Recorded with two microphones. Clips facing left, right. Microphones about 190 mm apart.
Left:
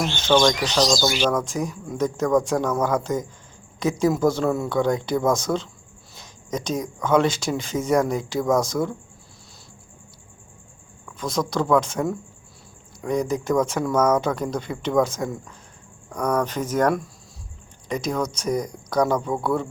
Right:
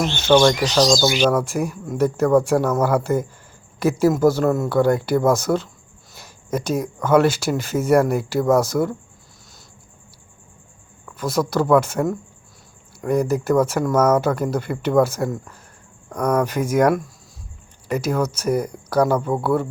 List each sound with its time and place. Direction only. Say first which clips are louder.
0.0 s speech: right 4 dB; 10° right (ahead or behind)
6.1 s a sound: right 4 dB; 5° right (ahead or behind)
7.0 s speech: right 3 dB; 5° right (ahead or behind)
11.0 s speech: right 4 dB; 5° right (ahead or behind)